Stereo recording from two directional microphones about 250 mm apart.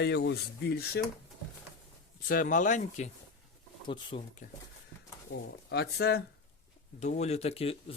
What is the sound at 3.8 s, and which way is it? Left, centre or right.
Speech, centre.